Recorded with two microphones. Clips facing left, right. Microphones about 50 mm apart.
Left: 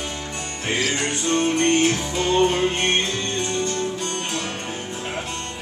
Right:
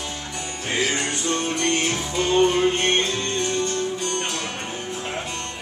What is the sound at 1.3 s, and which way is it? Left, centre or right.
Music, left.